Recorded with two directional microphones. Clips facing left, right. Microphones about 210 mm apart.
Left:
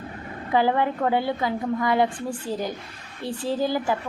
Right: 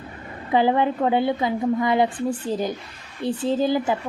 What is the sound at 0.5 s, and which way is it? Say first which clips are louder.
A woman's voice: right 2 dB; 20° right (ahead or behind).